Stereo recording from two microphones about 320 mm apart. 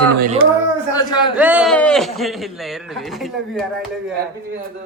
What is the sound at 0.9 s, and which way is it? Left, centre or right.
Speech, centre.